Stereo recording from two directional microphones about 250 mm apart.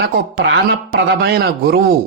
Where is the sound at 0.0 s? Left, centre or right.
Right.